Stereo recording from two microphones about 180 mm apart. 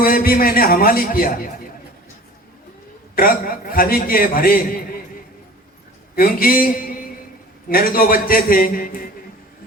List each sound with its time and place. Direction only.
0.0 s a man's voice: 55° left (ahead or behind)
3.2 s a man's voice: 50° left (ahead or behind)
6.1 s a man's voice: 50° left (ahead or behind)